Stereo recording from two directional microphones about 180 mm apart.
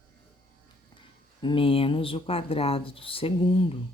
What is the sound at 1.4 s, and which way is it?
Speech, 30° left (ahead or behind).